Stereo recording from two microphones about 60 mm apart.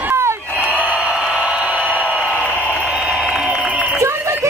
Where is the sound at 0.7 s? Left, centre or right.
Right.